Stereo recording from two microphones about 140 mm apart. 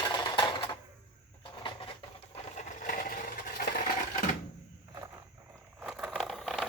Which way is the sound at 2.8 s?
75° left (ahead or behind).